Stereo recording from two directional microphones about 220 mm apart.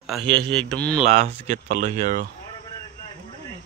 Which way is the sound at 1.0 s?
30° right (ahead or behind).